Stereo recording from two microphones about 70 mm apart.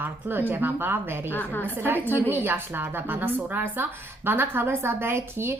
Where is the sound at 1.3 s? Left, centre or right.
Left.